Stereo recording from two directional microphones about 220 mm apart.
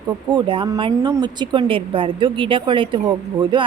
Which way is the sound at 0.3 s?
20° right (ahead or behind).